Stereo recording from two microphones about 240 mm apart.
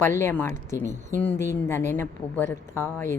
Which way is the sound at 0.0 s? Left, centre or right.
Centre.